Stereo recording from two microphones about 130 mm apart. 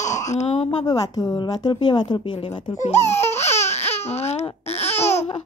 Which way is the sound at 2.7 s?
55° left (ahead or behind).